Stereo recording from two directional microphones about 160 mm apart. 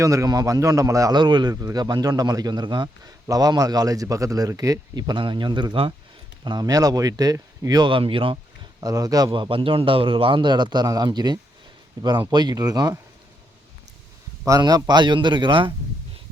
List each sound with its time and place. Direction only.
0.0 s a man's voice: 20° right (ahead or behind)
8.8 s a man's voice: 20° right (ahead or behind)
14.4 s a man's voice: 25° right (ahead or behind)